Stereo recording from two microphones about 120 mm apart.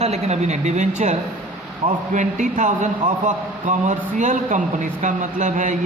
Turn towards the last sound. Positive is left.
turn(degrees=-90)